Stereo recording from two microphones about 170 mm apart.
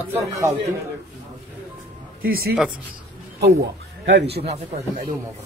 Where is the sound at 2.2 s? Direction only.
65° right (ahead or behind).